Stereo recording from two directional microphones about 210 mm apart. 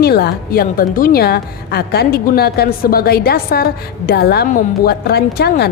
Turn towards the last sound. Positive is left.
turn(degrees=50)  # may be behind; listen again after turning